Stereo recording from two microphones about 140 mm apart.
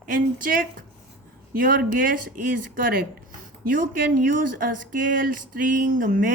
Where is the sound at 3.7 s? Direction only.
75° right (ahead or behind).